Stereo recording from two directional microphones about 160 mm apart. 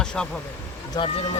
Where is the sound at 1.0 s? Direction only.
25° left (ahead or behind).